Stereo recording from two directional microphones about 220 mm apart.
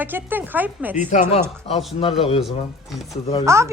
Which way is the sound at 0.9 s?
35° left (ahead or behind).